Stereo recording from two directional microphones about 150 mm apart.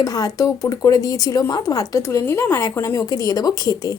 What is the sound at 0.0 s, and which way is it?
A woman's voice, 25° left (ahead or behind).